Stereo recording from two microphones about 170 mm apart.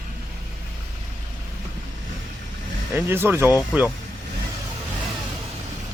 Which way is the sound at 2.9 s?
15° right (ahead or behind).